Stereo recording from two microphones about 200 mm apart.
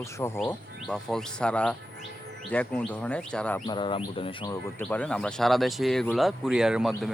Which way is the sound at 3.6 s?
25° left (ahead or behind).